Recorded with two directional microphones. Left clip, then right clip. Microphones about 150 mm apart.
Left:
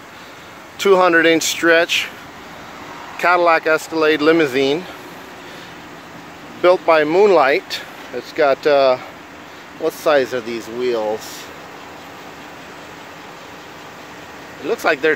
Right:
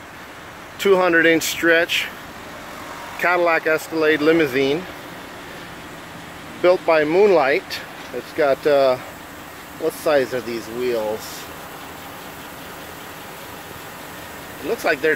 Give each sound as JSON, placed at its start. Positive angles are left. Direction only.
{"t": 0.7, "sound": "speech", "side_deg": 20}
{"t": 3.2, "sound": "speech", "side_deg": 15}
{"t": 6.6, "sound": "speech", "side_deg": 20}
{"t": 14.7, "sound": "speech", "side_deg": 30}